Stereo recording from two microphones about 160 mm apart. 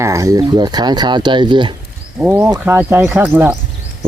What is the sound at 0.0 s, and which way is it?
Speech, 20° right (ahead or behind).